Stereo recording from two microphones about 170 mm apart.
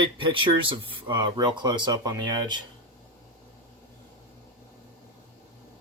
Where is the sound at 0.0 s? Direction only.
30° right (ahead or behind).